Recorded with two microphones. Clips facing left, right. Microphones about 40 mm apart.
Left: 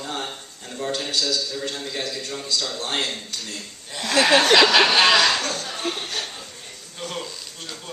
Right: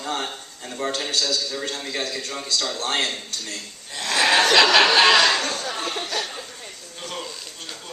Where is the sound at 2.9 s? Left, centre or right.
Centre.